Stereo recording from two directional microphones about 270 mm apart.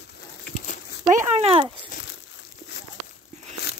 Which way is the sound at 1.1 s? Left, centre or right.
Right.